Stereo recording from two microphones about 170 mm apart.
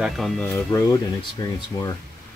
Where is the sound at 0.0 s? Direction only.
Centre (ahead or behind).